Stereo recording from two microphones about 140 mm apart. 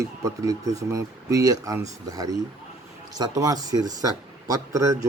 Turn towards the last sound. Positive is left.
turn(degrees=-20)  # may be behind; listen again after turning